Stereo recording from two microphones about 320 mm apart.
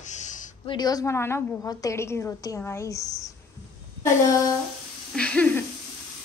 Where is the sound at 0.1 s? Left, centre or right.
Left.